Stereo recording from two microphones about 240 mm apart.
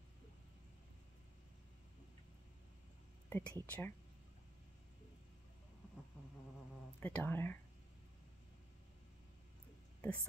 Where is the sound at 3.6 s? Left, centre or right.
Centre.